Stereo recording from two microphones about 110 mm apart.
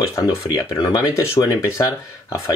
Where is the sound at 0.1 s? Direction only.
25° left (ahead or behind).